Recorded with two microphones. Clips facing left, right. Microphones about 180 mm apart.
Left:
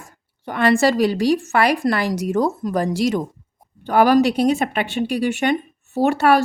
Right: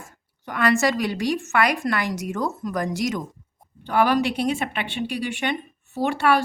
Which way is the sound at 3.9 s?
40° left (ahead or behind).